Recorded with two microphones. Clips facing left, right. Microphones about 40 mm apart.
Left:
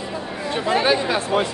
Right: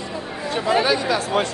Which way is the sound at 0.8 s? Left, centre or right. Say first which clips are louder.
Left 1 dB; left.